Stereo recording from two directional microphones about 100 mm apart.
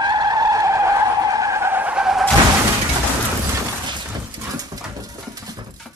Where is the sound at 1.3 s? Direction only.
30° right (ahead or behind).